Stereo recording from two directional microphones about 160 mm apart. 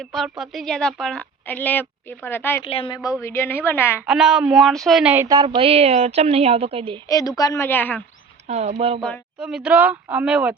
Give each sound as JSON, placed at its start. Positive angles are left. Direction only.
{"t": 0.0, "sound": "a woman's voice", "side_deg": 0}
{"t": 2.6, "sound": "a woman's voice", "side_deg": 35}
{"t": 3.2, "sound": "a woman's voice", "side_deg": 15}
{"t": 4.0, "sound": "speech", "side_deg": -5}
{"t": 5.1, "sound": "speech", "side_deg": -15}
{"t": 5.4, "sound": "a woman's voice", "side_deg": -30}
{"t": 7.1, "sound": "a woman's voice", "side_deg": 20}
{"t": 8.4, "sound": "speech", "side_deg": -45}
{"t": 9.0, "sound": "a woman's voice", "side_deg": 5}
{"t": 9.4, "sound": "speech", "side_deg": -5}